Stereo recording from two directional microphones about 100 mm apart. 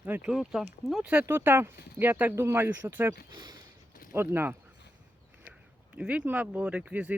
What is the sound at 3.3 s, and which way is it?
Speech, 45° right (ahead or behind).